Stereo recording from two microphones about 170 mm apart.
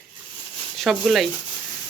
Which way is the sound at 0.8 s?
Centre (ahead or behind).